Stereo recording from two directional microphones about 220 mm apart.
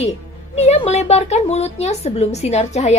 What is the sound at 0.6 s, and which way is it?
Speech, 30° left (ahead or behind).